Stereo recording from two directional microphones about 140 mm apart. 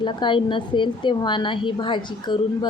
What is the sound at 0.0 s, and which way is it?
A woman's voice, 35° left (ahead or behind).